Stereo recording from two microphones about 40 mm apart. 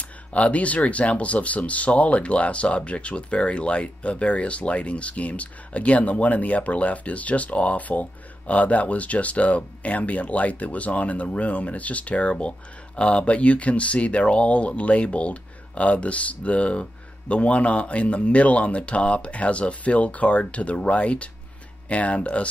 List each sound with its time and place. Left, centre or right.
0.3 s speech: left